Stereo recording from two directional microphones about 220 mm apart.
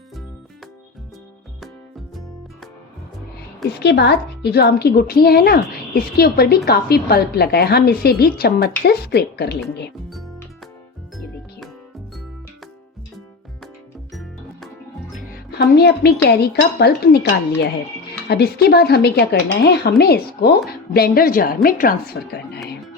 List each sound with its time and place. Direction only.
3.8 s a woman's voice: 50° left (ahead or behind)
14.1 s music: centre (ahead or behind)
15.5 s a woman's voice: 50° left (ahead or behind)
18.3 s a woman's voice: 45° left (ahead or behind)